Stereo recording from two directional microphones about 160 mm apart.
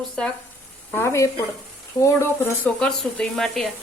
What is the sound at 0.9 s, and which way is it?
Speech, 15° left (ahead or behind).